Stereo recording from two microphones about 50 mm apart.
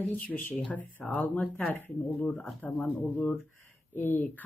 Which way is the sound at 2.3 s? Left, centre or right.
Centre.